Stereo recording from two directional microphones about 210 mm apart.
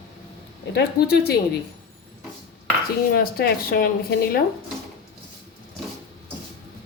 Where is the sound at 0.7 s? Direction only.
50° left (ahead or behind).